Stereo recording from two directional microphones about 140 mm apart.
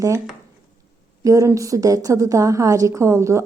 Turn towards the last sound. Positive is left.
turn(degrees=-20)  # may be behind; listen again after turning